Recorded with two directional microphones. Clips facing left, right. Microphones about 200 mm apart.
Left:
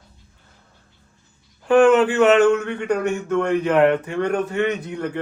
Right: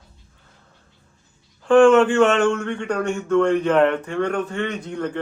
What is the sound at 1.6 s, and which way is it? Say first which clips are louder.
Speech: right 1 dB; 5° left (ahead or behind).